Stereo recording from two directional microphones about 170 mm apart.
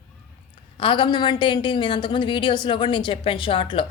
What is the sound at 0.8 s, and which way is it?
A woman's voice, 30° left (ahead or behind).